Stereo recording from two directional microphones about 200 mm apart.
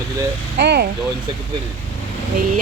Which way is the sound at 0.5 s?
55° right (ahead or behind).